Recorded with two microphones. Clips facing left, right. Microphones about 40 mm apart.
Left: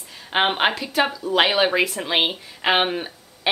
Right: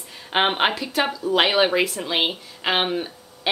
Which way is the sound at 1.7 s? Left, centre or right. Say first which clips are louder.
Left 1 dB; centre.